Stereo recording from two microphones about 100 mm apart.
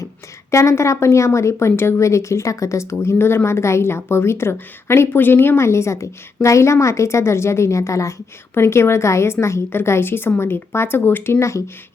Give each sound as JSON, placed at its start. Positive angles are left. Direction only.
{"t": 0.5, "sound": "speech", "side_deg": 30}